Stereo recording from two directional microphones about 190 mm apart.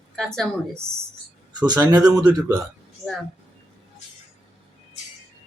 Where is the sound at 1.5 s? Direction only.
20° right (ahead or behind).